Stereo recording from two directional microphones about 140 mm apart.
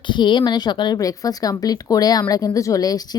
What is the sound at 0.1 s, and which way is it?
A woman's voice, 35° left (ahead or behind).